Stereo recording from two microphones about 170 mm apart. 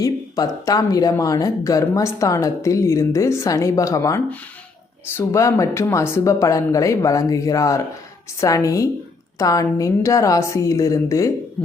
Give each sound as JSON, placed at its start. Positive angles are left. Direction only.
{"t": 0.0, "sound": "speech", "side_deg": 20}